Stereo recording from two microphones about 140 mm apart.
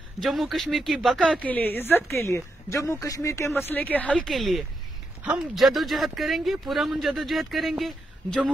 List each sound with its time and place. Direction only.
0.2 s a woman's voice: centre (ahead or behind)